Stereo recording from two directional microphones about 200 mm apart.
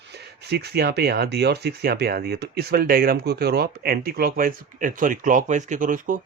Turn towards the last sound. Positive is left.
turn(degrees=-40)  # may be behind; listen again after turning